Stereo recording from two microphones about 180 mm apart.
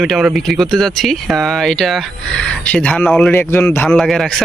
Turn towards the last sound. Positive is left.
turn(degrees=0)  # may be behind; listen again after turning